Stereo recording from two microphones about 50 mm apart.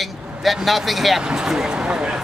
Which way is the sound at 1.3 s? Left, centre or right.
Centre.